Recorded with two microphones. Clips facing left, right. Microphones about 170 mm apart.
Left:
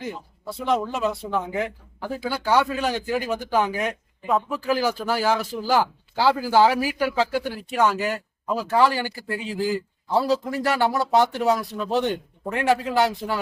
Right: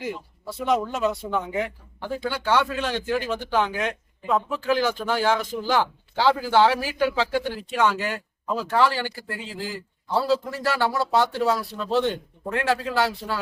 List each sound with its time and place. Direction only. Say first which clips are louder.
0.6 s a man's voice: even; centre (ahead or behind); by 13.4 s 15° left (ahead or behind)